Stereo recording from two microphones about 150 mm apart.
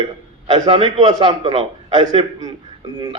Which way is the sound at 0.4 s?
30° right (ahead or behind).